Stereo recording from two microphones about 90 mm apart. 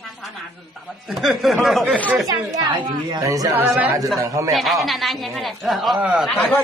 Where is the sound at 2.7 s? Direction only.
55° right (ahead or behind).